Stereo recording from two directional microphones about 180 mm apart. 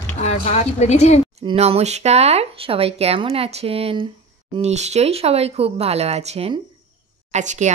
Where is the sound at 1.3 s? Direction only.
35° right (ahead or behind).